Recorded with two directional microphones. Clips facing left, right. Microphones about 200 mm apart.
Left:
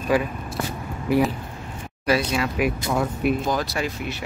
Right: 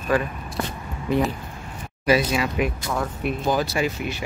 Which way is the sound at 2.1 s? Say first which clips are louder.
Right 2 dB; centre (ahead or behind).